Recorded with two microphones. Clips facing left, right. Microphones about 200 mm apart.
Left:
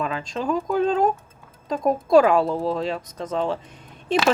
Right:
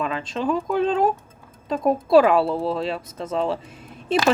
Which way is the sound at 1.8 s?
5° right (ahead or behind).